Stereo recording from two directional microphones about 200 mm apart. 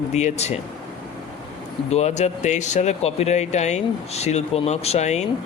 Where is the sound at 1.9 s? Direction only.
35° left (ahead or behind).